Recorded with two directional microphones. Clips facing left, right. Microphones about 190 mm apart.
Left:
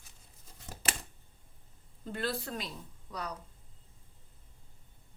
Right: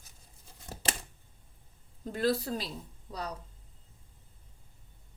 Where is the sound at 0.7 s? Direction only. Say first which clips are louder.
Right 2 dB; 30° right (ahead or behind).